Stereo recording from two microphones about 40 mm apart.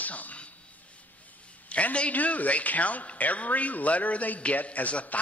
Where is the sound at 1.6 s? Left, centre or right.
Left.